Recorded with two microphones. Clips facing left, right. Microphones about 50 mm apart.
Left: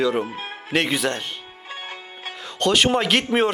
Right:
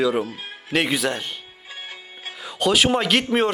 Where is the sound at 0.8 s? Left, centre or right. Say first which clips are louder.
Even; centre.